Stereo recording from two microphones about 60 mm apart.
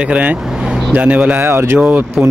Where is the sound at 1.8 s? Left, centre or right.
Right.